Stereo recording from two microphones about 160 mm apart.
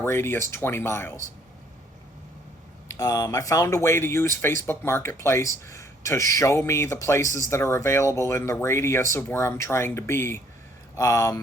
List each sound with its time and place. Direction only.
0.0 s speech: 15° left (ahead or behind)
2.9 s speech: 20° left (ahead or behind)